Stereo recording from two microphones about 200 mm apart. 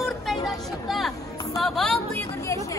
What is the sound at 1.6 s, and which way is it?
Music, 5° left (ahead or behind).